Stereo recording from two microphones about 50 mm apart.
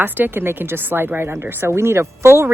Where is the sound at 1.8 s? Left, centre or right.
Right.